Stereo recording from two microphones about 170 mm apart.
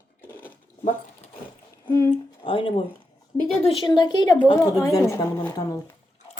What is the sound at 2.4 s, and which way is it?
A woman's voice, 30° left (ahead or behind).